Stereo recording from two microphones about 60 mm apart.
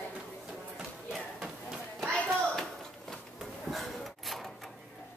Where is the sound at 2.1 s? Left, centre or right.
Centre.